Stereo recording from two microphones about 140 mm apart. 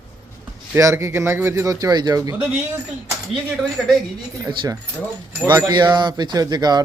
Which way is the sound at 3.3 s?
Centre (ahead or behind).